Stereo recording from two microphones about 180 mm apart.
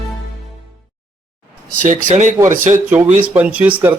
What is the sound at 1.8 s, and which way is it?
Speech, 45° right (ahead or behind).